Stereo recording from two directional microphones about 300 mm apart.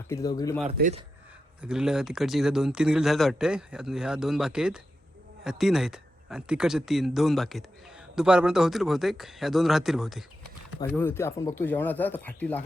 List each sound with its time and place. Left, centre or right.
0.1 s speech: centre
0.6 s speech: right
1.6 s speech: centre